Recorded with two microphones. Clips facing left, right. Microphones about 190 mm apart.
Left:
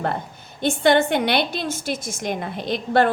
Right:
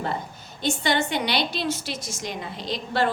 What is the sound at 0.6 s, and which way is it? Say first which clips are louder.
A woman's voice: left 7 dB; 55° left (ahead or behind).